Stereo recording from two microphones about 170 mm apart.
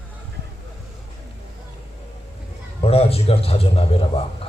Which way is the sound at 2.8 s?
35° left (ahead or behind).